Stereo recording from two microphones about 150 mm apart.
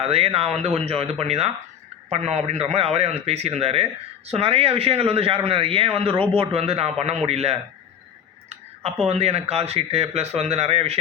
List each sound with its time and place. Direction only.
0.0 s a man's voice: 40° right (ahead or behind)
9.0 s speech: 45° right (ahead or behind)